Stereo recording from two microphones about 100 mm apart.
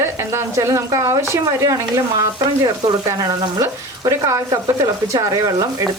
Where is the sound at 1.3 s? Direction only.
30° right (ahead or behind).